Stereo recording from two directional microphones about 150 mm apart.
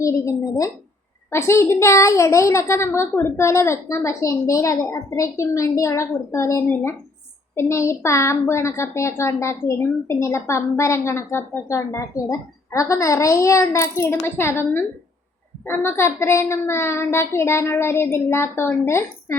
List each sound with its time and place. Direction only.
0.0 s a woman's voice: 20° left (ahead or behind)